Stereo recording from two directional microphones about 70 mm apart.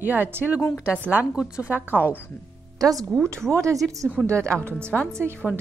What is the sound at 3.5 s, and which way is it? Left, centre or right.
Speech, right.